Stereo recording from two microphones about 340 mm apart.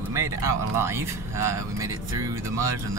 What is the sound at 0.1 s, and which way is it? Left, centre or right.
Speech, centre.